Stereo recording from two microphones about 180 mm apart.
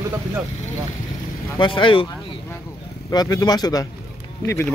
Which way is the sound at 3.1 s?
20° left (ahead or behind).